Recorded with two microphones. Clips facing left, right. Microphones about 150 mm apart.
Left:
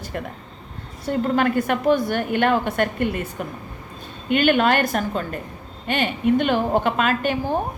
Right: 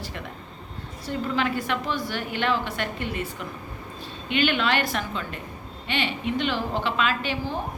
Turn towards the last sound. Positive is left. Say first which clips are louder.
# left 6 dB
turn(degrees=50)  # may be behind; listen again after turning